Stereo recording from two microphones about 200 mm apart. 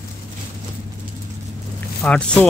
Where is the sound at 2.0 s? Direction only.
5° left (ahead or behind).